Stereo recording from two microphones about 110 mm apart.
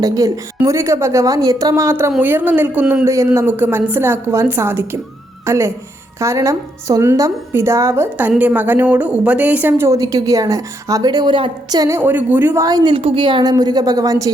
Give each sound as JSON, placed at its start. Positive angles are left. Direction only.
{"t": 0.0, "sound": "a woman's voice", "side_deg": -30}
{"t": 3.1, "sound": "a woman's voice", "side_deg": -25}
{"t": 11.8, "sound": "speech", "side_deg": -25}
{"t": 12.5, "sound": "a woman's voice", "side_deg": -35}
{"t": 12.9, "sound": "a woman's voice", "side_deg": -50}